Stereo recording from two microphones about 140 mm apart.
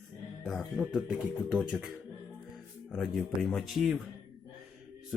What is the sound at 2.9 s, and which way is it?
Speech, centre (ahead or behind).